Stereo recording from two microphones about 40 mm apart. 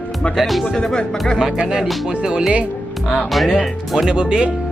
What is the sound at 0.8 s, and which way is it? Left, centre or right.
Speech, left.